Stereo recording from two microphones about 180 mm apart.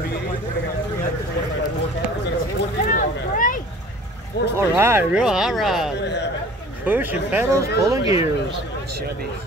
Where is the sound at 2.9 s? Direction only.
45° left (ahead or behind).